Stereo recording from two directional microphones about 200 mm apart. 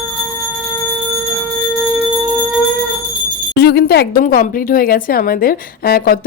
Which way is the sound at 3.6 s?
55° left (ahead or behind).